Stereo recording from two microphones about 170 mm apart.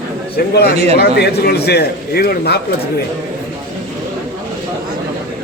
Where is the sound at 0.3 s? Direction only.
70° left (ahead or behind).